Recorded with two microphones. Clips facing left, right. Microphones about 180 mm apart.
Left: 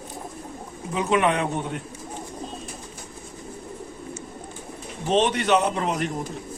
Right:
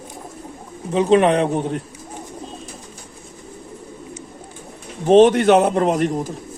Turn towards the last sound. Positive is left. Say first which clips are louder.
# right 8 dB
turn(degrees=-45)  # may be behind; listen again after turning